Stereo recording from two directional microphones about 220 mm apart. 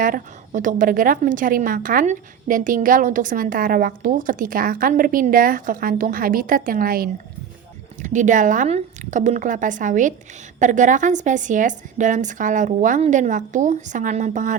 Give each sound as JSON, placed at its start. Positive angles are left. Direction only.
{"t": 0.0, "sound": "a woman's voice", "side_deg": -35}